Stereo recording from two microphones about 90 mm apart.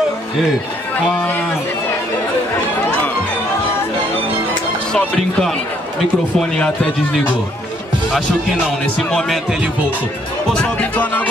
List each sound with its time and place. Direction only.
4.9 s speech: 10° left (ahead or behind)
10.5 s speech: 15° left (ahead or behind)